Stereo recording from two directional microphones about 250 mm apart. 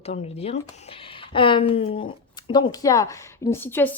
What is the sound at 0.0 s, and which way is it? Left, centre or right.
Speech, left.